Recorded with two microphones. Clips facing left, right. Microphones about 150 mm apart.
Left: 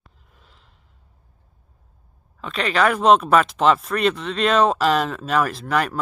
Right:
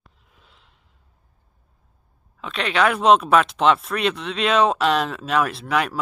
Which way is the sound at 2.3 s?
Centre (ahead or behind).